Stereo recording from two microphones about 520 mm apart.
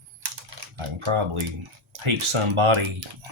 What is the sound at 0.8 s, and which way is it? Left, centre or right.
Speech, right.